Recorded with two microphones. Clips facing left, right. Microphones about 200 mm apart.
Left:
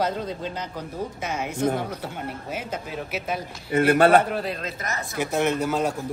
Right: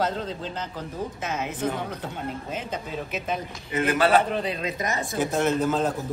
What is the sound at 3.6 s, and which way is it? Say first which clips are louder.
Speech: left 5 dB; 55° left (ahead or behind).